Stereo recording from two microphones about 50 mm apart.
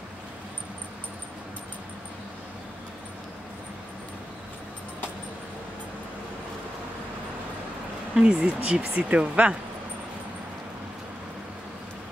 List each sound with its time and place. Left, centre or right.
8.1 s speech: centre